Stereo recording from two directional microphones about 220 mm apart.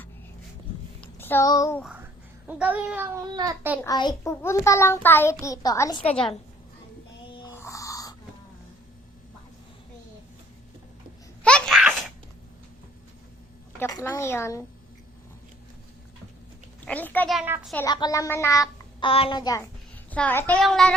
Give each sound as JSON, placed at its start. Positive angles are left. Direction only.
{"t": 1.0, "sound": "a child's voice", "side_deg": 10}
{"t": 2.5, "sound": "a child's voice", "side_deg": -5}
{"t": 3.8, "sound": "a child's voice", "side_deg": 15}
{"t": 7.5, "sound": "music", "side_deg": 15}
{"t": 11.4, "sound": "laughter", "side_deg": 5}
{"t": 13.7, "sound": "a child's voice", "side_deg": 10}
{"t": 16.8, "sound": "a child's voice", "side_deg": 5}
{"t": 17.4, "sound": "a child's voice", "side_deg": -10}
{"t": 17.8, "sound": "a child's voice", "side_deg": 20}
{"t": 20.1, "sound": "a child's voice", "side_deg": 5}